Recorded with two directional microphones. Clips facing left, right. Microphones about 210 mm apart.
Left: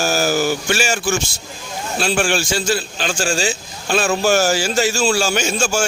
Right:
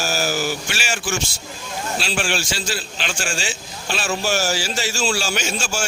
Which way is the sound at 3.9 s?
50° left (ahead or behind).